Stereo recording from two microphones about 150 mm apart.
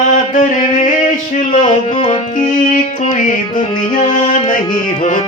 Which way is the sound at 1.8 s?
35° left (ahead or behind).